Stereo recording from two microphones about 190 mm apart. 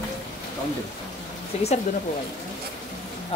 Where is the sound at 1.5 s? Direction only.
35° left (ahead or behind).